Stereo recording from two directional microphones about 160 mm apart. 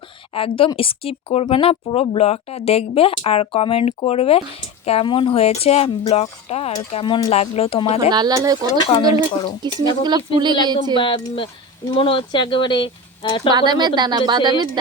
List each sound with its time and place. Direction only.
0.3 s speech: 35° left (ahead or behind)
8.1 s a woman's voice: 25° right (ahead or behind)
8.8 s speech: 30° left (ahead or behind)
9.6 s a woman's voice: 25° right (ahead or behind)
10.9 s speech: 30° left (ahead or behind)
13.5 s a woman's voice: 25° right (ahead or behind)